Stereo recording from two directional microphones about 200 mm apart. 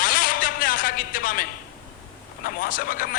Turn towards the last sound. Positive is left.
turn(degrees=45)  # may be behind; listen again after turning